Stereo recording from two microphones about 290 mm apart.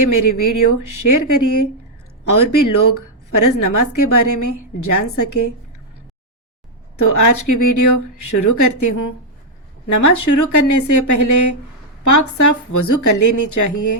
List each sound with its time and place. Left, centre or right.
0.0 s a woman's voice: left
6.9 s a woman's voice: left